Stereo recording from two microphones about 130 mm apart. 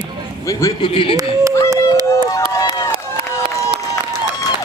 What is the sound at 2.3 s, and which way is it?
Run, 25° left (ahead or behind).